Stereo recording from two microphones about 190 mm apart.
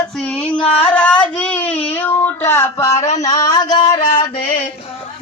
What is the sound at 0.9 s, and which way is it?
Child singing, 5° left (ahead or behind).